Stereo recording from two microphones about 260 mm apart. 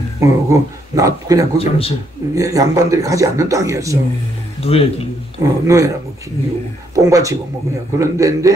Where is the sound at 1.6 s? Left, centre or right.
Left.